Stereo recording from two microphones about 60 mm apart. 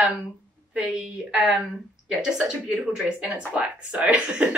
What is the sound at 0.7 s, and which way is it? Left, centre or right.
Speech, centre.